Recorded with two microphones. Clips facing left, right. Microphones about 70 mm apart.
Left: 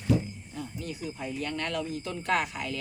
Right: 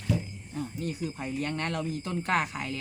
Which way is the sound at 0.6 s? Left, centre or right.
Right.